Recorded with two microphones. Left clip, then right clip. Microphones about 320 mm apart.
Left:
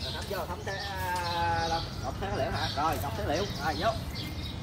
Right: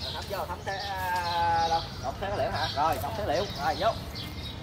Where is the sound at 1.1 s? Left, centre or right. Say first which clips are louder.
Right 3 dB; right.